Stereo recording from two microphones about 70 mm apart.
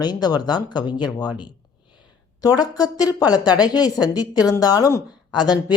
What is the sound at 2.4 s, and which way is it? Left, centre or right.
Speech, left.